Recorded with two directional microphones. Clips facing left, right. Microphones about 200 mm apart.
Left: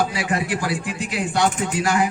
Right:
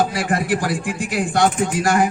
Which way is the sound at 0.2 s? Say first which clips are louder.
Right 3 dB; 50° right (ahead or behind).